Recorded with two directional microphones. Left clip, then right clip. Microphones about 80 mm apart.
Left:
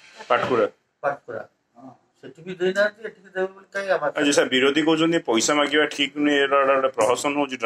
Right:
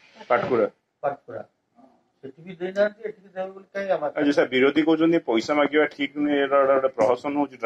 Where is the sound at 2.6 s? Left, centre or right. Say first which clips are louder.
Left 2 dB; centre.